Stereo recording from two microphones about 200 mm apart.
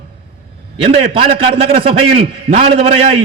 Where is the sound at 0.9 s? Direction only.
30° right (ahead or behind).